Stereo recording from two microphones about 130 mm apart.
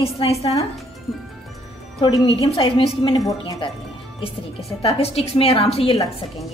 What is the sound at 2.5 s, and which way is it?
Speech, 45° left (ahead or behind).